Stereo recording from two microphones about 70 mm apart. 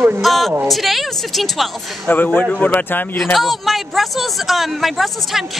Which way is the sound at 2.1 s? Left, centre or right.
Left.